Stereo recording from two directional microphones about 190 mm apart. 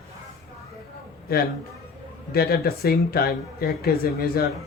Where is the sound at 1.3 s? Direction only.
55° left (ahead or behind).